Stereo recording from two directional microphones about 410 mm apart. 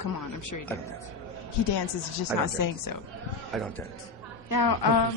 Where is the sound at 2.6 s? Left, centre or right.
Left.